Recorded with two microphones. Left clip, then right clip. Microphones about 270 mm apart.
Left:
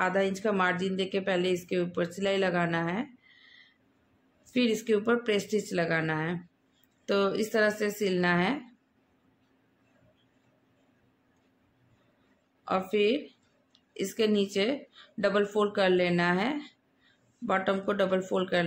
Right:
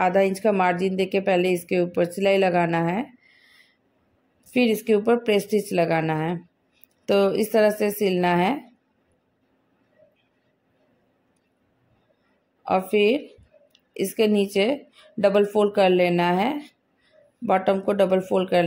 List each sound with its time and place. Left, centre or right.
0.0 s speech: centre
12.6 s speech: centre